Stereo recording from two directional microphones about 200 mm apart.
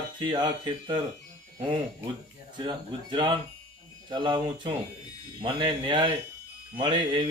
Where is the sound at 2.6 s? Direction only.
25° right (ahead or behind).